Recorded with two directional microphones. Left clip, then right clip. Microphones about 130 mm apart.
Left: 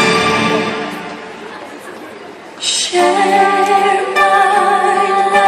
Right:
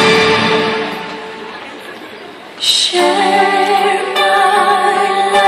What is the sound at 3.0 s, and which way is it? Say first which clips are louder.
Female singing: left 3 dB; 15° right (ahead or behind).